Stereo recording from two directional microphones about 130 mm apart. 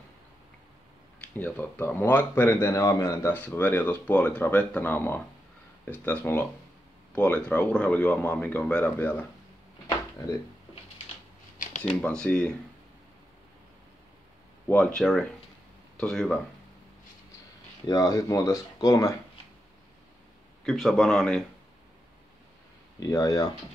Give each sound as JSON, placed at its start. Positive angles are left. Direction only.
{"t": 1.3, "sound": "speech", "side_deg": 15}
{"t": 11.5, "sound": "a sound", "side_deg": 90}
{"t": 12.0, "sound": "speech", "side_deg": 10}
{"t": 14.7, "sound": "a man's voice", "side_deg": 5}
{"t": 17.8, "sound": "speech", "side_deg": 30}
{"t": 20.6, "sound": "a man's voice", "side_deg": 0}
{"t": 22.9, "sound": "speech", "side_deg": 25}